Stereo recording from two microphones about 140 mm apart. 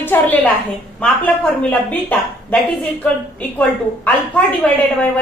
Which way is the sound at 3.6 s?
10° left (ahead or behind).